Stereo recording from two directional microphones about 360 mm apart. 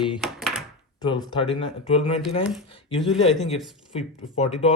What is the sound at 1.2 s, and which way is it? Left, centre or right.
Speech, centre.